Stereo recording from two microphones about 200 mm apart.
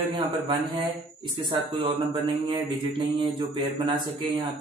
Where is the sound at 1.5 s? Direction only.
20° right (ahead or behind).